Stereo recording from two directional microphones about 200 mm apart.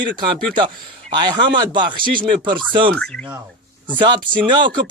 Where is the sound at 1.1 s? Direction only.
20° right (ahead or behind).